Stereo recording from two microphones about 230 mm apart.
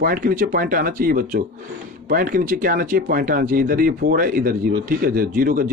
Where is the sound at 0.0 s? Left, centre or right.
Right.